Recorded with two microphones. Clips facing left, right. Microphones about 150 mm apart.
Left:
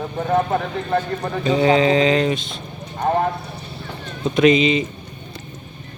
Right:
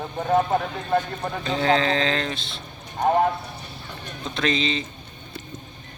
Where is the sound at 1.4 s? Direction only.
5° left (ahead or behind).